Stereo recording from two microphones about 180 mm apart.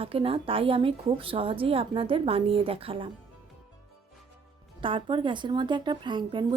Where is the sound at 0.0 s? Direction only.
30° right (ahead or behind).